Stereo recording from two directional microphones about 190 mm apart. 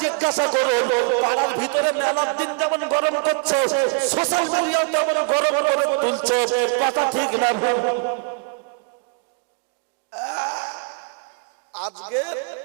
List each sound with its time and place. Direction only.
0.0 s a sound: 15° right (ahead or behind)
0.3 s speech: 25° right (ahead or behind)
5.2 s a man's voice: 30° right (ahead or behind)
7.9 s a man's voice: 30° right (ahead or behind)
10.2 s wail: 25° right (ahead or behind)
11.7 s a man's voice: 35° right (ahead or behind)